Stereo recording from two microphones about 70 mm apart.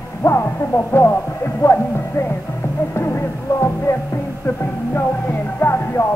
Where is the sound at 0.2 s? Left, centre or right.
Left.